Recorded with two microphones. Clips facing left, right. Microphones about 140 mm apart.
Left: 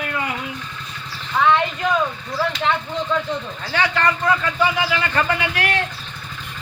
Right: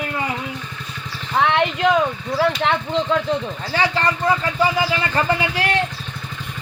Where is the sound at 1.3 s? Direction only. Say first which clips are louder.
Even; 70° right (ahead or behind).